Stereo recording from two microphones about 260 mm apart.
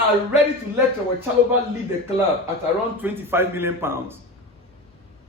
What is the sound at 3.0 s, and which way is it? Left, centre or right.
A man's voice, centre.